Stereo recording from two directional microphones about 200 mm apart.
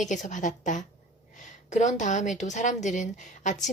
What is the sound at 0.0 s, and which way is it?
A woman's voice, 40° left (ahead or behind).